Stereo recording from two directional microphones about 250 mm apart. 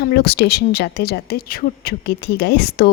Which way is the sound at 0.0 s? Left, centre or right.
Left.